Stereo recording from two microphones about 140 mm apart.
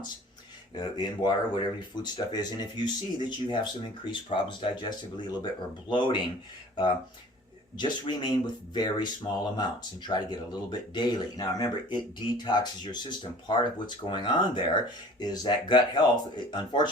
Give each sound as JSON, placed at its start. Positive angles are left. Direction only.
{"t": 0.8, "sound": "speech", "side_deg": 30}
{"t": 7.8, "sound": "speech", "side_deg": 30}